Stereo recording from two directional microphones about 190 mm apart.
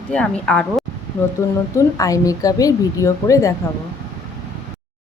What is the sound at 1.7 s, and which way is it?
A woman's voice, 15° left (ahead or behind).